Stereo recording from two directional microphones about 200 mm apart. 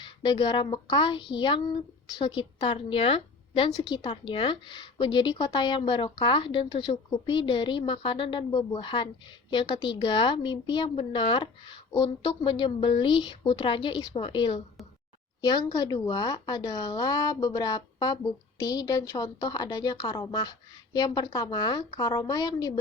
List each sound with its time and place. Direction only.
0.0 s a woman's voice: 20° left (ahead or behind)